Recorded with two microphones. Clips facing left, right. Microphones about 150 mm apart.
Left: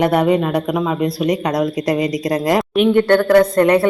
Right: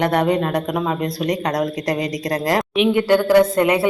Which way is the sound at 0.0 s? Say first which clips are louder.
Left 3 dB; 5° left (ahead or behind).